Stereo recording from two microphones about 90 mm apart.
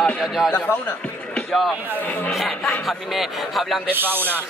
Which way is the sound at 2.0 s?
15° left (ahead or behind).